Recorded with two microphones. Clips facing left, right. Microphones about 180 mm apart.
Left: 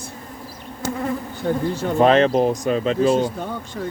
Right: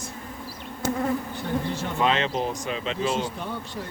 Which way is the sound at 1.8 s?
45° left (ahead or behind).